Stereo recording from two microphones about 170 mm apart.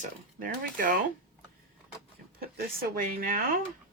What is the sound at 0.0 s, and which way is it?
A woman's voice, 55° right (ahead or behind).